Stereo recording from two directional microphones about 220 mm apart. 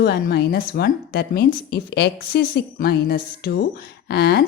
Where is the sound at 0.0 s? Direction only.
50° left (ahead or behind).